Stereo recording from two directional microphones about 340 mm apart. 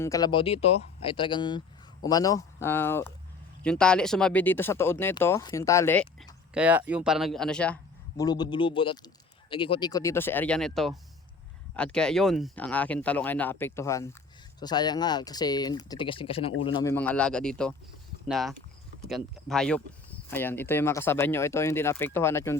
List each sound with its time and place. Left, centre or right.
0.0 s speech: centre